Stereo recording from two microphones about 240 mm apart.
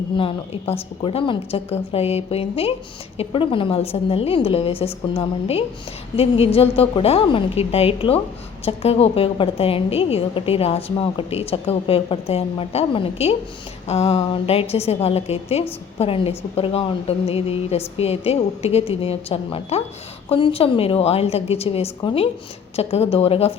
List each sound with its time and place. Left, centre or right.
0.7 s a woman's voice: left